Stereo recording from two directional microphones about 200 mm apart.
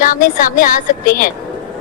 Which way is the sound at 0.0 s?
40° left (ahead or behind).